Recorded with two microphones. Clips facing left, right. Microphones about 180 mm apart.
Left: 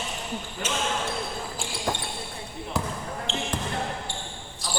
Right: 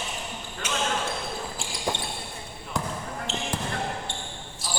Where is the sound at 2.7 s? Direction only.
5° left (ahead or behind).